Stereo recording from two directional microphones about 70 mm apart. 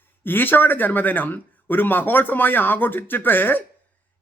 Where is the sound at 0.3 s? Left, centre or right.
Left.